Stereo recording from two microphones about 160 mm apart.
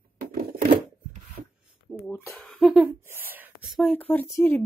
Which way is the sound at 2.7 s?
10° right (ahead or behind).